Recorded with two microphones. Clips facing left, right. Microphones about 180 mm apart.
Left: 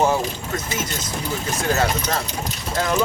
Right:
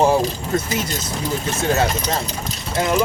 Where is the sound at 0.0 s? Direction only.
30° right (ahead or behind).